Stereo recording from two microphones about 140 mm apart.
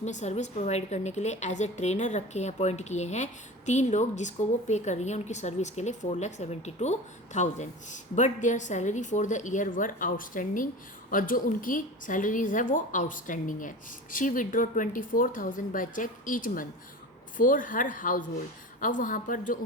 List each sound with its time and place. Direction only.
0.0 s a woman's voice: 55° left (ahead or behind); by 19.5 s 75° left (ahead or behind)